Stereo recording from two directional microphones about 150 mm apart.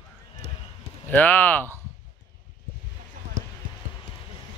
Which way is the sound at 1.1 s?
10° left (ahead or behind).